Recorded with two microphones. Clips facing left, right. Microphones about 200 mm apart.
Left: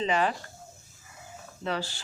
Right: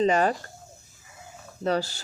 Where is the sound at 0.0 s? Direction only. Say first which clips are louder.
Right 5 dB; 45° right (ahead or behind).